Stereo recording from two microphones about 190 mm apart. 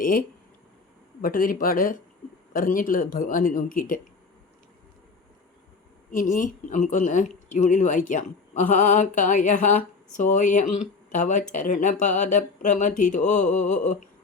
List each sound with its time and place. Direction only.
0.0 s speech: 45° left (ahead or behind)
6.1 s speech: 45° left (ahead or behind)